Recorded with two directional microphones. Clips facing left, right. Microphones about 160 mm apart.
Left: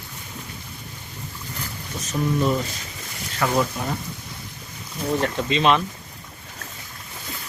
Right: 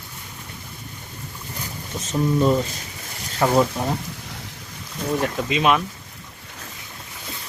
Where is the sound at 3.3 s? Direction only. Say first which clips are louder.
Right 4 dB; 30° right (ahead or behind).